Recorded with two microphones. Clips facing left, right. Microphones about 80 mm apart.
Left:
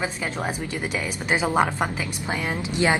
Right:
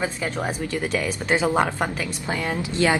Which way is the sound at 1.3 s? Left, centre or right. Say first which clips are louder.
Even; centre.